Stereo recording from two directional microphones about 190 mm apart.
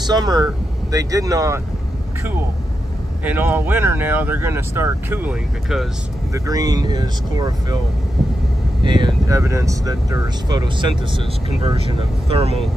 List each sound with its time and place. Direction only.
0.0 s speech: 20° right (ahead or behind)
3.3 s speech: 10° right (ahead or behind)
6.3 s speech: 20° right (ahead or behind)
8.8 s speech: 25° right (ahead or behind)